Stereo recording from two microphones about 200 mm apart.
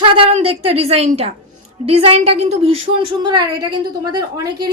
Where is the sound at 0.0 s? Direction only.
30° right (ahead or behind).